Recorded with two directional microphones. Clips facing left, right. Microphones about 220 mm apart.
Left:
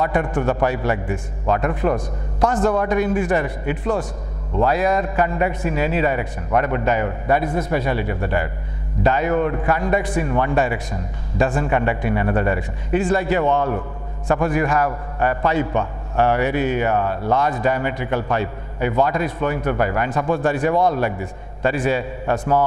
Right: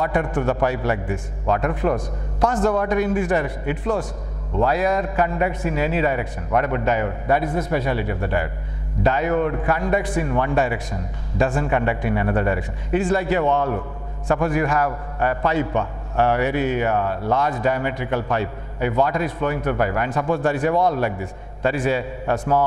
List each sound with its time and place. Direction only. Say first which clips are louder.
0.0 s a man's voice: left 1 dB; 15° left (ahead or behind)